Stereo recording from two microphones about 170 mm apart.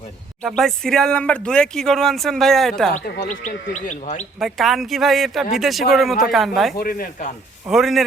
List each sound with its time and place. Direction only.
0.4 s speech: centre (ahead or behind)
3.2 s speech: 45° left (ahead or behind)
4.4 s speech: centre (ahead or behind)
6.7 s a man's voice: 55° left (ahead or behind)
7.7 s speech: centre (ahead or behind)